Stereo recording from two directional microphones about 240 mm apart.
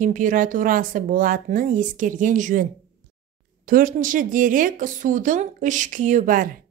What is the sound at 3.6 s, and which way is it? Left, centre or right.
A woman's voice, right.